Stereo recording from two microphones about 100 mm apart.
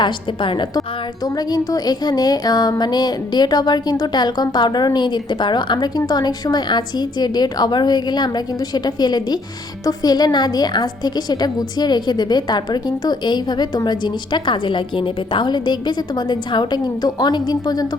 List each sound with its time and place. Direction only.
1.5 s a woman's voice: 40° left (ahead or behind)